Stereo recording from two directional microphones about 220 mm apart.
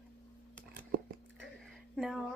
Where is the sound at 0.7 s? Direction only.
50° right (ahead or behind).